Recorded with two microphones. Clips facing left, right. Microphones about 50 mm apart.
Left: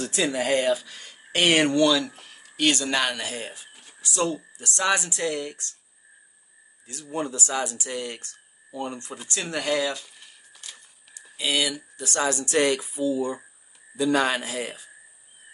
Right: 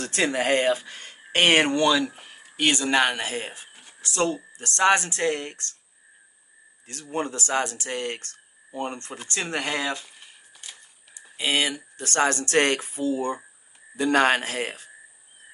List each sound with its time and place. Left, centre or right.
0.0 s speech: right
6.9 s speech: right
10.2 s a sound: centre
11.3 s speech: right
12.0 s speech: right